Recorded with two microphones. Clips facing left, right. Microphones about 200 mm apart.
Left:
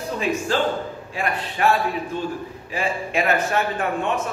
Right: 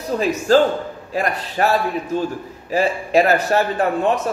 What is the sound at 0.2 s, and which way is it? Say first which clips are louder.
A man's voice: right 7 dB; 40° right (ahead or behind).